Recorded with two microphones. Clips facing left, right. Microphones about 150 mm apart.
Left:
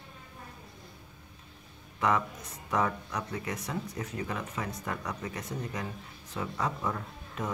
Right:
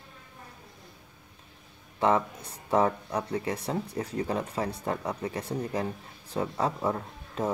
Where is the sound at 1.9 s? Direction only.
30° right (ahead or behind).